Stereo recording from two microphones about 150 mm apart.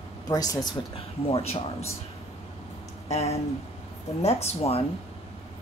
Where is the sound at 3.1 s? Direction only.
45° left (ahead or behind).